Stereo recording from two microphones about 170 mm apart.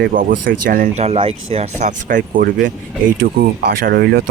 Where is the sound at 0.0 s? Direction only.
55° right (ahead or behind).